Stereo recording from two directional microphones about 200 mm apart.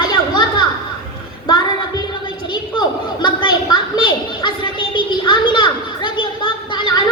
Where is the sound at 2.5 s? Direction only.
20° left (ahead or behind).